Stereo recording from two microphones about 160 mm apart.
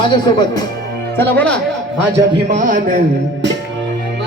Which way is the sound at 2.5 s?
55° right (ahead or behind).